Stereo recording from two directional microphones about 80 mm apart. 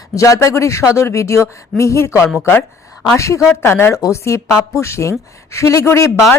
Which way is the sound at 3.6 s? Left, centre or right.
Left.